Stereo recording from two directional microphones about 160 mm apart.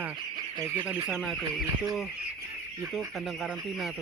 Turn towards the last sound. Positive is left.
turn(degrees=0)  # may be behind; listen again after turning